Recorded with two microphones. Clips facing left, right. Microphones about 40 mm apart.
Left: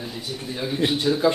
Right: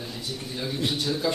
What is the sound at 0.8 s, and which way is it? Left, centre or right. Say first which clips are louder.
Speech: left 7 dB; left.